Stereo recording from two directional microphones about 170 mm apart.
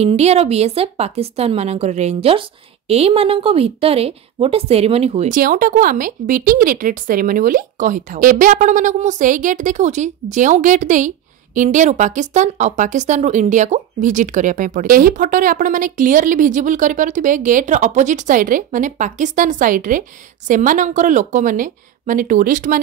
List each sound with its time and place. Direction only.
0.0 s a woman's voice: 40° right (ahead or behind)
5.3 s speech: 55° right (ahead or behind)